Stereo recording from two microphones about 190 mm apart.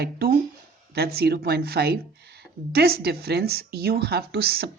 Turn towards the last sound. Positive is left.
turn(degrees=-55)  # may be behind; listen again after turning